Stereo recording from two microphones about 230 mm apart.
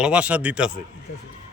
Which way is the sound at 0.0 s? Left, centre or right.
Centre.